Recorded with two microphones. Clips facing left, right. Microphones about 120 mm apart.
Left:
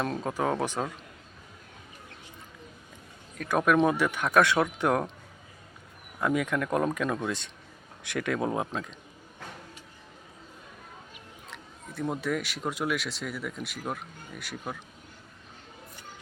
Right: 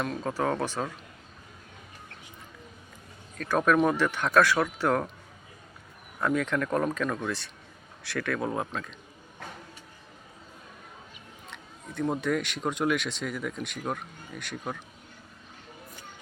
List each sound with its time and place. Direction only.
0.2 s speech: 20° left (ahead or behind)
3.3 s speech: 15° left (ahead or behind)
6.1 s speech: 10° left (ahead or behind)
11.5 s speech: centre (ahead or behind)